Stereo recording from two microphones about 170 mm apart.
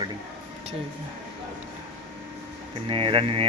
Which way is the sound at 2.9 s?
30° right (ahead or behind).